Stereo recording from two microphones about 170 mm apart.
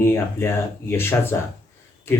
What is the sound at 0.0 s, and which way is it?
Speech, 15° left (ahead or behind).